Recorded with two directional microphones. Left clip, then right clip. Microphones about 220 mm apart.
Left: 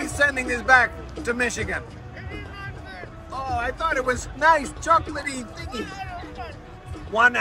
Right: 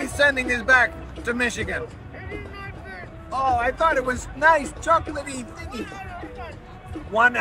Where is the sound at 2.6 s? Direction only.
Centre (ahead or behind).